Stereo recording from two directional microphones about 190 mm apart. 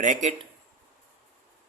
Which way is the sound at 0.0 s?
40° right (ahead or behind).